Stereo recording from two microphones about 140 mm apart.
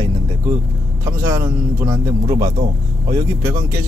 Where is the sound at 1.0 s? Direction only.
20° right (ahead or behind).